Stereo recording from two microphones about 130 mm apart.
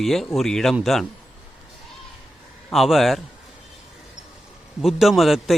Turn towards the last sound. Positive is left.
turn(degrees=0)  # may be behind; listen again after turning